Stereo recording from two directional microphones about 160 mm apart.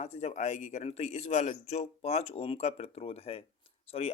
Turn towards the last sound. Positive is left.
turn(degrees=35)  # may be behind; listen again after turning